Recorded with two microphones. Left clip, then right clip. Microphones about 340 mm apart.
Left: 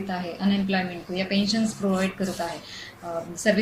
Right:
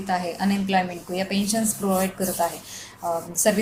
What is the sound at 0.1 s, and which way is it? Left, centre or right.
A woman's voice, centre.